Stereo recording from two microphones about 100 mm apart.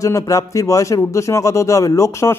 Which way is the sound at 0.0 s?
35° left (ahead or behind).